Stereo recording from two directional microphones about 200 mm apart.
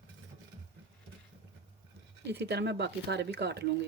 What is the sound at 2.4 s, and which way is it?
Speech, 55° right (ahead or behind).